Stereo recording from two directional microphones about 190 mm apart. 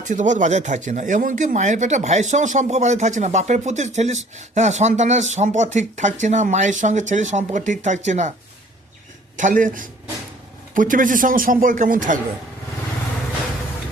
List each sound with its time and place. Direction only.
0.1 s speech: 40° right (ahead or behind)
9.4 s speech: 45° right (ahead or behind)